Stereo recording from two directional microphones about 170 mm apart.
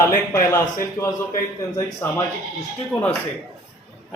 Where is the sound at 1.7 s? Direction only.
15° left (ahead or behind).